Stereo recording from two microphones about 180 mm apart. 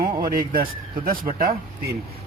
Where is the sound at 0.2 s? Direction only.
55° right (ahead or behind).